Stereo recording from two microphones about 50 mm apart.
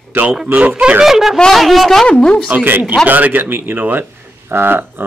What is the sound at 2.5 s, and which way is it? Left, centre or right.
Speech, right.